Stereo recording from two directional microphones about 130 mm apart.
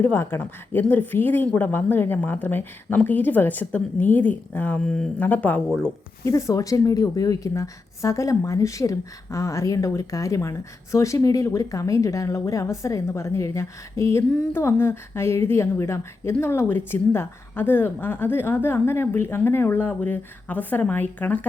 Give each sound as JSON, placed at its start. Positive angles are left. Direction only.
{"t": 0.0, "sound": "speech", "side_deg": 20}
{"t": 6.2, "sound": "speech", "side_deg": 25}